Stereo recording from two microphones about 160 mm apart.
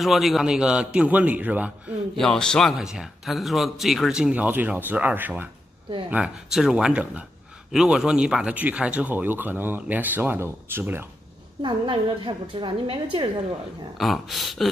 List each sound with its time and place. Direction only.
0.0 s speech: centre (ahead or behind)
2.1 s speech: 5° left (ahead or behind); by 11.1 s 10° right (ahead or behind)
11.6 s a woman's voice: 30° right (ahead or behind)
13.9 s speech: centre (ahead or behind)